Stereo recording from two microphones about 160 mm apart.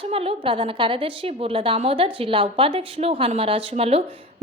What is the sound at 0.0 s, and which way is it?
A woman's voice, 35° right (ahead or behind).